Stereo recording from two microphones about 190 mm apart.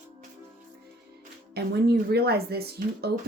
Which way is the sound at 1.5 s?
55° right (ahead or behind).